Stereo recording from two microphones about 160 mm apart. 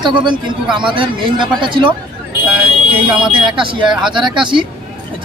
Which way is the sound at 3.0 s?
5° right (ahead or behind).